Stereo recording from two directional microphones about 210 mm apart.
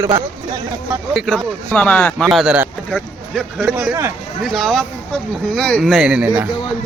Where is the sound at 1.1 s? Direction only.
5° right (ahead or behind).